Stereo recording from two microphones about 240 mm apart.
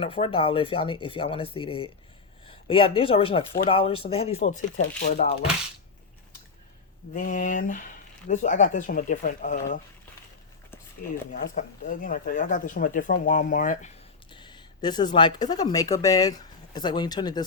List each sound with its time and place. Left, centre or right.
0.0 s speech: left
7.1 s speech: left
11.3 s speech: left
14.3 s speech: centre